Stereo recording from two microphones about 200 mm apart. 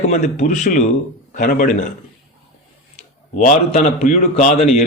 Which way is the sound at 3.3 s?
35° left (ahead or behind).